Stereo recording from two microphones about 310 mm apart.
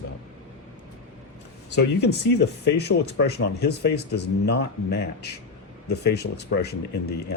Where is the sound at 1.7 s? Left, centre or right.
Left.